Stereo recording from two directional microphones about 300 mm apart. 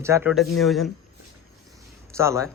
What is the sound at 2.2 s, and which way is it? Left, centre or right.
Speech, centre.